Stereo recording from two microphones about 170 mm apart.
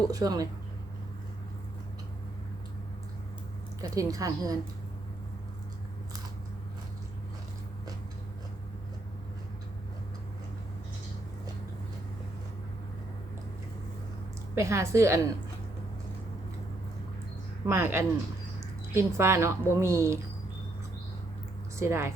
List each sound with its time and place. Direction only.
0.1 s a woman's voice: 20° right (ahead or behind)
3.8 s a woman's voice: 20° right (ahead or behind)
14.5 s speech: 15° right (ahead or behind)
17.7 s speech: 15° right (ahead or behind)
21.8 s speech: 15° right (ahead or behind)